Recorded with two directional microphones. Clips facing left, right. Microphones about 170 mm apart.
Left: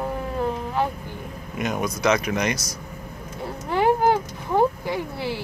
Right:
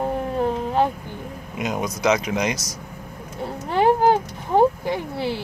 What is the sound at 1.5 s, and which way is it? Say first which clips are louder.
Speech: even; 15° right (ahead or behind).